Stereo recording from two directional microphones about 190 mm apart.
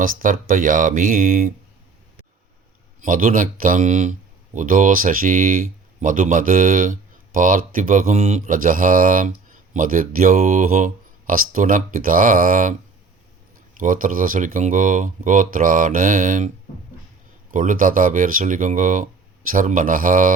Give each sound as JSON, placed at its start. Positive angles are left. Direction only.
{"t": 0.0, "sound": "speech", "side_deg": -45}
{"t": 3.0, "sound": "speech", "side_deg": -45}
{"t": 13.7, "sound": "speech", "side_deg": -45}
{"t": 17.5, "sound": "speech", "side_deg": -45}